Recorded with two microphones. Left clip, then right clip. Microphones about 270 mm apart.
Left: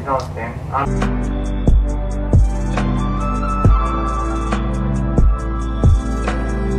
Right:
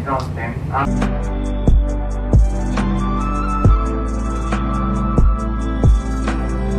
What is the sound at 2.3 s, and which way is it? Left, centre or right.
Music, centre.